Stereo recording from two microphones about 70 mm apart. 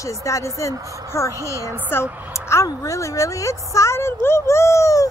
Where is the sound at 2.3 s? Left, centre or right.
Left.